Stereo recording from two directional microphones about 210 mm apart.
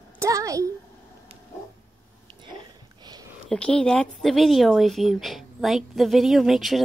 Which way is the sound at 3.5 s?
5° left (ahead or behind).